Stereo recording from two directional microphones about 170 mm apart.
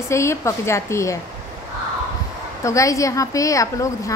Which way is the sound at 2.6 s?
20° left (ahead or behind).